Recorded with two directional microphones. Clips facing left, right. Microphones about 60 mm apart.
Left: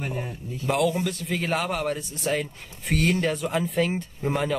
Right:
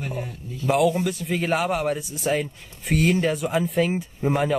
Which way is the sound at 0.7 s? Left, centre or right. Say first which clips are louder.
Right 3 dB; centre.